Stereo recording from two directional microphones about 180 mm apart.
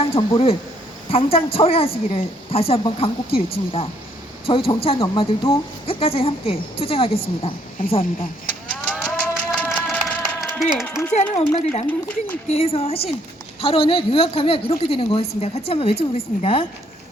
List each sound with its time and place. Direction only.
0.0 s a woman's voice: 30° left (ahead or behind)
8.7 s a sound: 5° left (ahead or behind)
11.1 s a woman's voice: 35° left (ahead or behind)
11.9 s speech: 10° left (ahead or behind)
12.5 s a woman's voice: 35° left (ahead or behind)